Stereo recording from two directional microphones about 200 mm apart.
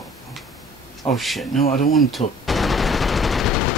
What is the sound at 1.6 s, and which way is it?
Speech, 45° left (ahead or behind).